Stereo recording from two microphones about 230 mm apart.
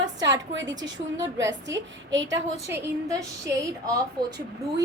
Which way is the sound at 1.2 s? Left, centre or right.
Right.